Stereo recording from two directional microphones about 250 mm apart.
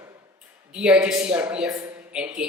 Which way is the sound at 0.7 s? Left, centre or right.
Centre.